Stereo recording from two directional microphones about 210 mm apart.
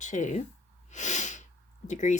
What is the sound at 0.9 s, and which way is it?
Snort, 35° left (ahead or behind).